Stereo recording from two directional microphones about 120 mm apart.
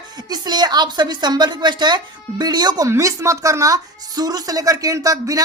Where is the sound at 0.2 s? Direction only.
35° right (ahead or behind).